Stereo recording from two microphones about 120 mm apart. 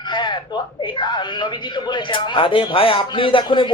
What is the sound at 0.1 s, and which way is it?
A man's voice, 40° left (ahead or behind).